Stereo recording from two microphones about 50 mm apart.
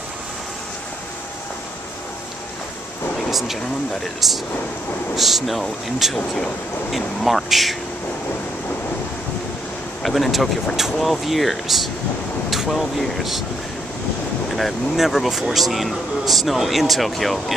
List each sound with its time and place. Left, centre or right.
3.3 s speech: centre
6.1 s speech: centre
6.9 s speech: centre
10.0 s speech: centre
14.5 s speech: centre